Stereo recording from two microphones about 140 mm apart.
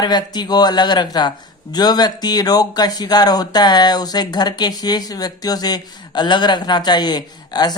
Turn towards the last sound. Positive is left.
turn(degrees=30)  # may be behind; listen again after turning